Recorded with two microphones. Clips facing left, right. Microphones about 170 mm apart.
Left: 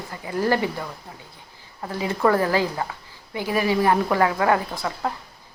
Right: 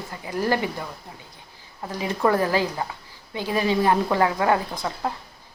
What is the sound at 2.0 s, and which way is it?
A woman's voice, 20° right (ahead or behind).